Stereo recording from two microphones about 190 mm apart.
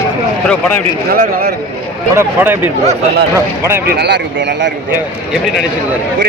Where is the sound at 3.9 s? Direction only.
60° right (ahead or behind).